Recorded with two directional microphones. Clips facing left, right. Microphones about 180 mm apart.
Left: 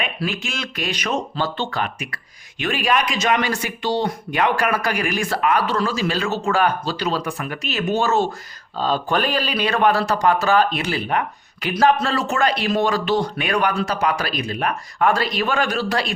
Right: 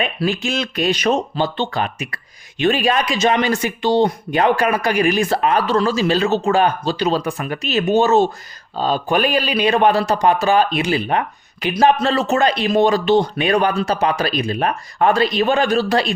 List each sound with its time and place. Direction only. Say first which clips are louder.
0.0 s speech: right 5 dB; 30° right (ahead or behind)
1.4 s a man's voice: right 4 dB; 20° right (ahead or behind)